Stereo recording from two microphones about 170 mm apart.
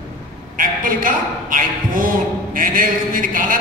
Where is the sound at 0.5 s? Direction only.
55° right (ahead or behind).